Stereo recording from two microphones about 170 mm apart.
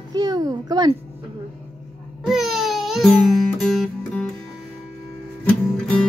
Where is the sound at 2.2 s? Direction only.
Centre (ahead or behind).